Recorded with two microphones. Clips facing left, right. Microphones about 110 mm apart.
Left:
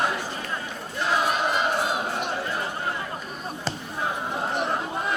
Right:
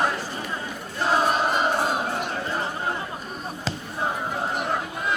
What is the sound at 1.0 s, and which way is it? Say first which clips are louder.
Choir: right 3 dB; 40° right (ahead or behind).